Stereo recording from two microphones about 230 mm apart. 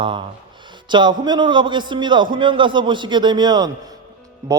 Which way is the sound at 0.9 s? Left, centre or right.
Centre.